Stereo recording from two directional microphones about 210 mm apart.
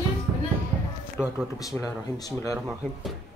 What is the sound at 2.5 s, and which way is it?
Speech, centre (ahead or behind).